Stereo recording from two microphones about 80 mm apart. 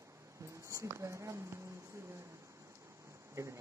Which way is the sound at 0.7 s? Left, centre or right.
Right.